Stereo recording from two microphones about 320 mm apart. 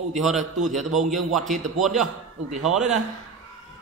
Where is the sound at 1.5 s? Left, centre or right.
Right.